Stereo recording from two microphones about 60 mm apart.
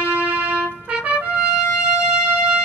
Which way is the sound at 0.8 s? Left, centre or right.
Right.